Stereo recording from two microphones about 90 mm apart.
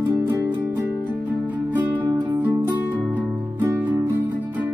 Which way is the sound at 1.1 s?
15° right (ahead or behind).